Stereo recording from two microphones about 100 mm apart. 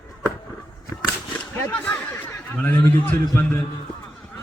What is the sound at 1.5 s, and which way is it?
Speech, 25° left (ahead or behind).